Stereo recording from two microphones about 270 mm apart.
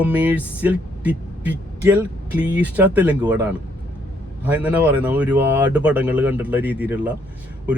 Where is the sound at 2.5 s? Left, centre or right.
Centre.